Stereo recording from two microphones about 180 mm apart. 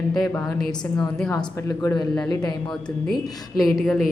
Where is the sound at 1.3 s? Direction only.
20° left (ahead or behind).